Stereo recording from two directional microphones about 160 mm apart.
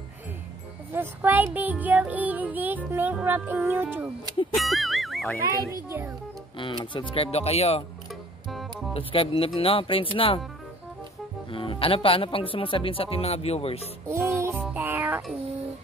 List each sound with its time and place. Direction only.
0.9 s music: 10° right (ahead or behind)
4.6 s speech: centre (ahead or behind)
5.9 s music: 15° right (ahead or behind)
6.6 s speech: 30° left (ahead or behind)
8.9 s speech: 35° left (ahead or behind)
11.5 s speech: 35° left (ahead or behind)
14.0 s music: 15° right (ahead or behind)